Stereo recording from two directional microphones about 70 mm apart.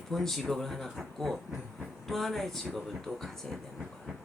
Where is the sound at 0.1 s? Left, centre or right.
Centre.